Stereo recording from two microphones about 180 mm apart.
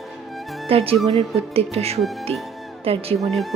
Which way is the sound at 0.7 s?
30° right (ahead or behind).